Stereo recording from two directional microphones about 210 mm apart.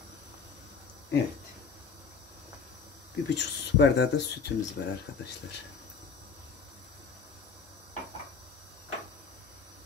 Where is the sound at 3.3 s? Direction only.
55° left (ahead or behind).